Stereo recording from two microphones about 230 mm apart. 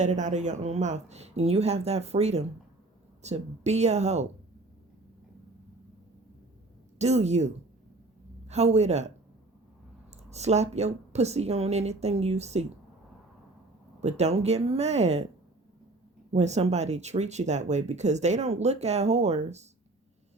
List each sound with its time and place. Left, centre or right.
0.0 s speech: right
7.0 s speech: right
10.2 s speech: right
14.0 s speech: right
16.3 s speech: right